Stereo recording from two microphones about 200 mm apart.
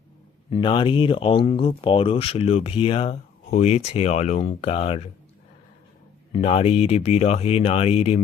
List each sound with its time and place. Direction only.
0.5 s speech: 25° left (ahead or behind)
6.3 s speech: 30° left (ahead or behind)